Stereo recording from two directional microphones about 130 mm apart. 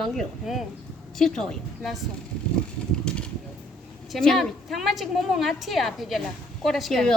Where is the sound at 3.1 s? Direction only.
5° left (ahead or behind).